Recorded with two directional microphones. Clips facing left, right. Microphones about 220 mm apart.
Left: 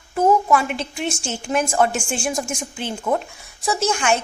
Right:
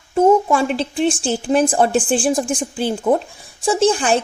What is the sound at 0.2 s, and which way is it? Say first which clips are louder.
A woman's voice: right 4 dB; 30° right (ahead or behind).